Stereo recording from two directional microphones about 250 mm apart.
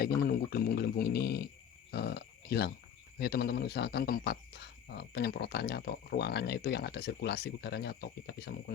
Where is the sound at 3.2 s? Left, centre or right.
Left.